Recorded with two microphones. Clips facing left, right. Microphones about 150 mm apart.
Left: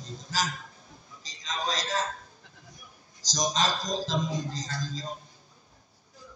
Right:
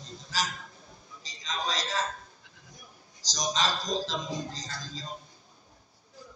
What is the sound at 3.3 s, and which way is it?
Speech, 45° left (ahead or behind).